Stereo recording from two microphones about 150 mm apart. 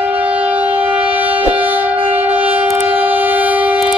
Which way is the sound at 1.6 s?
10° right (ahead or behind).